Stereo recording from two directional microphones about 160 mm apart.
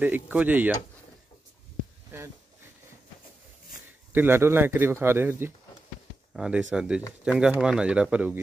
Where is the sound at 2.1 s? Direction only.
15° right (ahead or behind).